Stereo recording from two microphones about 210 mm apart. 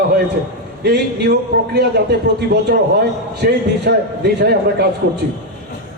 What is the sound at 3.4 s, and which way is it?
A man's voice, 45° right (ahead or behind).